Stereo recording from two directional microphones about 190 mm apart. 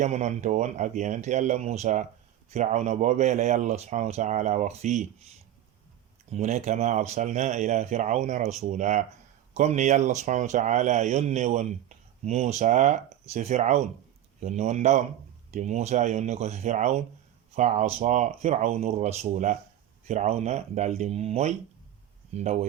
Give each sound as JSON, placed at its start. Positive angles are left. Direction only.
{"t": 0.0, "sound": "speech", "side_deg": -40}
{"t": 6.3, "sound": "speech", "side_deg": -35}